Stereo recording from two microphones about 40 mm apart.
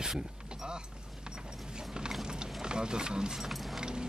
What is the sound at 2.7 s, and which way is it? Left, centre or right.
Speech, right.